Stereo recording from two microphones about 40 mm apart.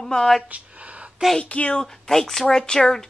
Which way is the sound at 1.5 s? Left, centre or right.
Left.